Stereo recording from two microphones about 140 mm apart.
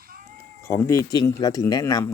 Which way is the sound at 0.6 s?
20° left (ahead or behind).